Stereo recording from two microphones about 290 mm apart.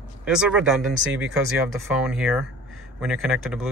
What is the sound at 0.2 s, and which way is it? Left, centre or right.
Speech, centre.